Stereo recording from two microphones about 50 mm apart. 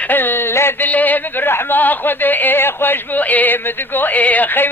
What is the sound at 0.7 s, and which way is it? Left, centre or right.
Speech, left.